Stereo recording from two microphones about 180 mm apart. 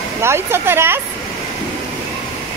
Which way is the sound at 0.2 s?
15° right (ahead or behind).